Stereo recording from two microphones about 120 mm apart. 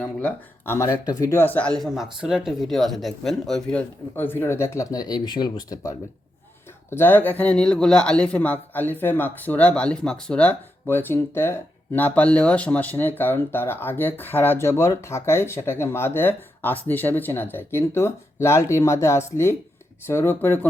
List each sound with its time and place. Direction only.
0.0 s speech: 10° left (ahead or behind)
4.1 s speech: 20° left (ahead or behind)
6.9 s speech: 15° left (ahead or behind)